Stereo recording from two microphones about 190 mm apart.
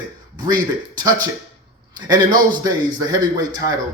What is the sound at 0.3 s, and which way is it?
Speech, 20° right (ahead or behind).